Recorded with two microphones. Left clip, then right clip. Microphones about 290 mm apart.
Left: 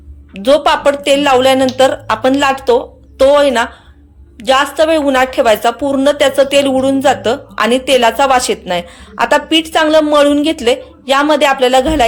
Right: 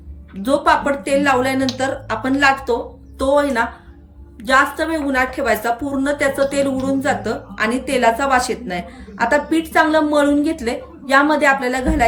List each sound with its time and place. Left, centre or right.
0.4 s a woman's voice: centre